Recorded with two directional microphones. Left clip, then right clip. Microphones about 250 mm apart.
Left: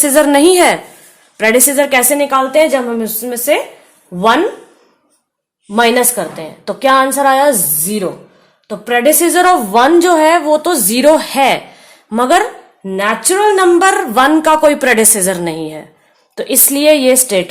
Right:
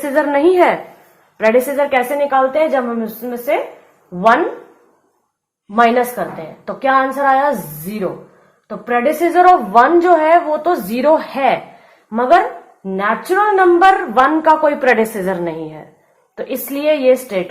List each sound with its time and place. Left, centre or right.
0.0 s a woman's voice: left
5.7 s a woman's voice: left
8.6 s a woman's voice: left